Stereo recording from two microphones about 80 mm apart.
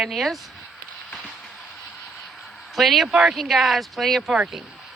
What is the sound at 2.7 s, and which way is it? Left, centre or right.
Speech, centre.